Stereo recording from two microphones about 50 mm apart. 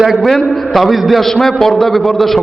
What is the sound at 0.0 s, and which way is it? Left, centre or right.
A man's voice, centre.